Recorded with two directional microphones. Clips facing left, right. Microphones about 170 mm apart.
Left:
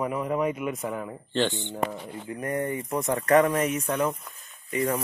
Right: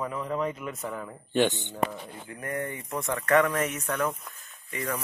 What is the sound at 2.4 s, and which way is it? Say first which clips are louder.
Speech: left 4 dB; 35° left (ahead or behind).